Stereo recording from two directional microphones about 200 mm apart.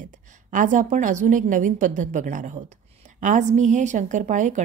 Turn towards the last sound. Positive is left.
turn(degrees=-35)  # may be behind; listen again after turning